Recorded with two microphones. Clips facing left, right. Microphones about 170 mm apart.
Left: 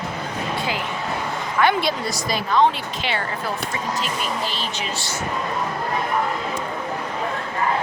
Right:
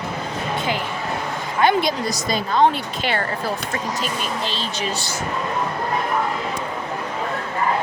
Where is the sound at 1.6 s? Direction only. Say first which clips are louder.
Right 2 dB; 20° right (ahead or behind).